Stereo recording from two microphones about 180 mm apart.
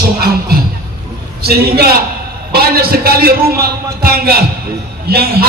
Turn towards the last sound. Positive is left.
turn(degrees=-60)  # may be behind; listen again after turning